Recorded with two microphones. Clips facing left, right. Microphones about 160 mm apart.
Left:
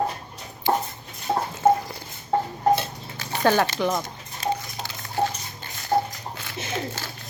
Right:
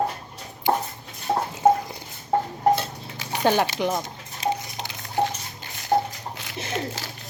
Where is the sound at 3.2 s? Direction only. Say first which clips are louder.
Left 1 dB; 15° right (ahead or behind).